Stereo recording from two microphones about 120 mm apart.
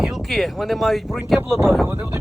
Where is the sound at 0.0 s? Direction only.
Centre (ahead or behind).